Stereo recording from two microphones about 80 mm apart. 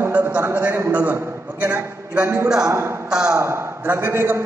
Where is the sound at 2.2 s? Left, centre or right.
Right.